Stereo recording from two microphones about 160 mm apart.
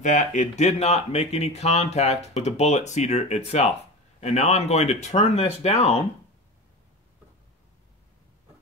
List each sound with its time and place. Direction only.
0.0 s speech: 50° left (ahead or behind)